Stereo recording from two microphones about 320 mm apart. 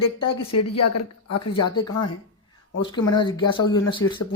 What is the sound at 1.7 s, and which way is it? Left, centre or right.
Speech, centre.